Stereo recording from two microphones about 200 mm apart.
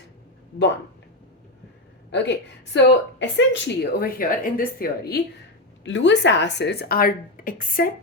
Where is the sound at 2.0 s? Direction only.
65° left (ahead or behind).